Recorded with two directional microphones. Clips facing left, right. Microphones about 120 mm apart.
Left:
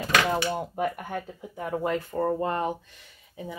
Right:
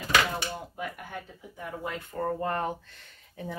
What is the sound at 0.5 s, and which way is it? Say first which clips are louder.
Speech: left 8 dB; 55° left (ahead or behind).